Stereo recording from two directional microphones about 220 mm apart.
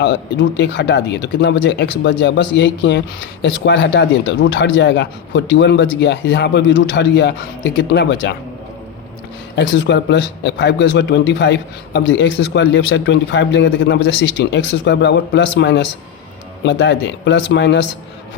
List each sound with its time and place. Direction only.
0.0 s a man's voice: 55° left (ahead or behind)
9.6 s a man's voice: 55° left (ahead or behind)